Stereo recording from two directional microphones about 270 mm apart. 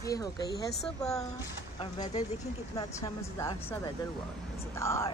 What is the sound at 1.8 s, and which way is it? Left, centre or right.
Speech, left.